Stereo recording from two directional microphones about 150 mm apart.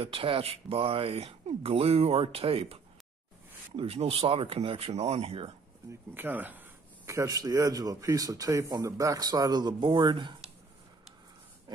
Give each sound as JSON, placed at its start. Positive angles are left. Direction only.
{"t": 0.0, "sound": "speech", "side_deg": -35}
{"t": 5.9, "sound": "speech", "side_deg": -15}